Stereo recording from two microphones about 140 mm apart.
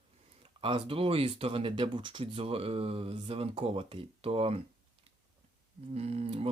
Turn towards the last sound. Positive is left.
turn(degrees=-45)  # may be behind; listen again after turning